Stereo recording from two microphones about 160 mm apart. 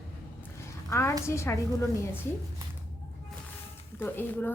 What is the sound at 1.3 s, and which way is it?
Speech, 15° left (ahead or behind).